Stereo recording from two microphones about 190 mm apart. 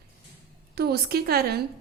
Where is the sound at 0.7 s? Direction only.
55° right (ahead or behind).